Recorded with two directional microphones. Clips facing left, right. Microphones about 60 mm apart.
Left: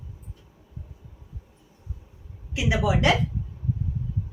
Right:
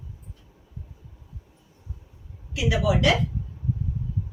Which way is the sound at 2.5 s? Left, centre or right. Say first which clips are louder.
Right 1 dB; left.